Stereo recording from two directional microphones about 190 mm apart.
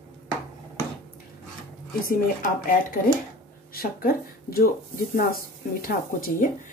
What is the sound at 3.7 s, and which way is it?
Speech, 50° left (ahead or behind).